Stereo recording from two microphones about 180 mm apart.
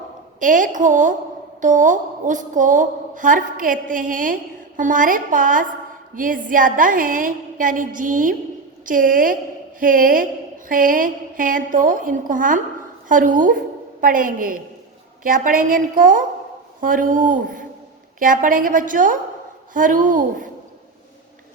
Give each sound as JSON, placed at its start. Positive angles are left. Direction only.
{"t": 0.3, "sound": "a woman's voice", "side_deg": -45}